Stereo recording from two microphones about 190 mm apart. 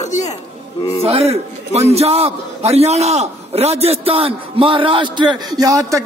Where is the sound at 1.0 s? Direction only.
30° right (ahead or behind).